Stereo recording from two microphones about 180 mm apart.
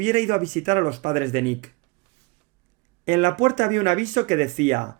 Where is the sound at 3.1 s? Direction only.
45° right (ahead or behind).